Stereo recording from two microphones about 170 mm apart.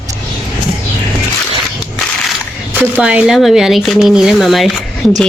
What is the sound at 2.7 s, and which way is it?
Speech, 10° right (ahead or behind).